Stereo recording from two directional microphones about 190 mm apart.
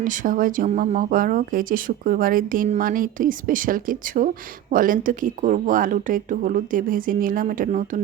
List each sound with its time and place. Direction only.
0.0 s speech: 45° right (ahead or behind)